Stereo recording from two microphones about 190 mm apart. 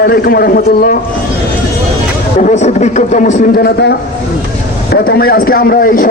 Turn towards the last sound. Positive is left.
turn(degrees=50)  # may be behind; listen again after turning